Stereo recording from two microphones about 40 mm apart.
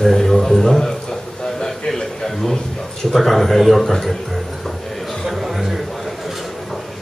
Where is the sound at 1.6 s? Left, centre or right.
Centre.